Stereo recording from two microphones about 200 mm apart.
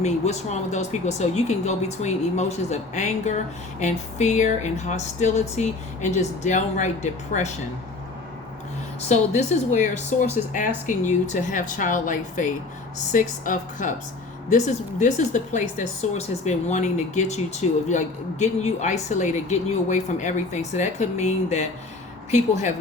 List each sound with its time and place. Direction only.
0.0 s speech: 35° left (ahead or behind)
9.0 s speech: 35° left (ahead or behind)